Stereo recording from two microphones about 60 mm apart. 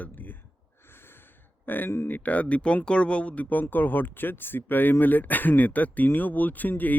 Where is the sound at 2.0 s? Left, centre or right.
Left.